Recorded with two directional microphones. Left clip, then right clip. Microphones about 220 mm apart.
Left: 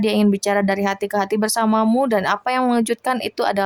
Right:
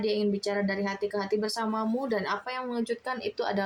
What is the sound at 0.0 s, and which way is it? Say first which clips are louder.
Speech: left 9 dB; 40° left (ahead or behind).